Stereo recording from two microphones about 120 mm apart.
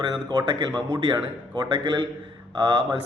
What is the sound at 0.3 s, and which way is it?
Speech, 35° right (ahead or behind).